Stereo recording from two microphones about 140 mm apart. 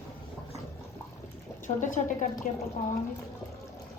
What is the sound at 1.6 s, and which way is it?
Speech, 65° left (ahead or behind).